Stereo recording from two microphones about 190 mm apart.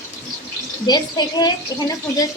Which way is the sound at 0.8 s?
20° left (ahead or behind).